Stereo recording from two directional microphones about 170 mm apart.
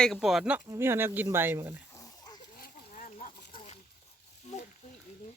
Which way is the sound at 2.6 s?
50° left (ahead or behind).